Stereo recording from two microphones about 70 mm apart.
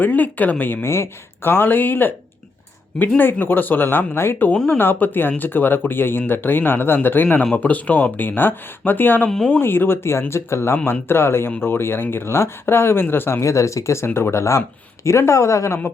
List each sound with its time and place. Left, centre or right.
0.0 s speech: left
3.2 s speech: left
4.5 s speech: centre
4.8 s speech: left